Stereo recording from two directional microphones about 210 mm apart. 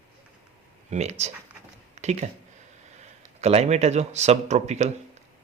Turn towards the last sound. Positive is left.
turn(degrees=-30)  # may be behind; listen again after turning